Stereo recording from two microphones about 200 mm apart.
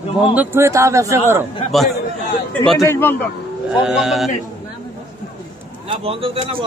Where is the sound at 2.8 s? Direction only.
10° left (ahead or behind).